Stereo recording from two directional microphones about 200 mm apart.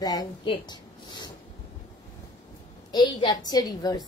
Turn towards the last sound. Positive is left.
turn(degrees=20)  # may be behind; listen again after turning